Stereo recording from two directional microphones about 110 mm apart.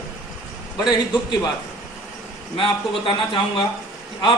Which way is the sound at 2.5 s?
50° left (ahead or behind).